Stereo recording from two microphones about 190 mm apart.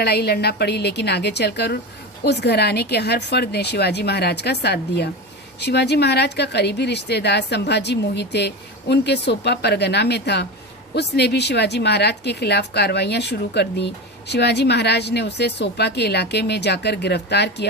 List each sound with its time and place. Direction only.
0.0 s a woman's voice: 55° left (ahead or behind)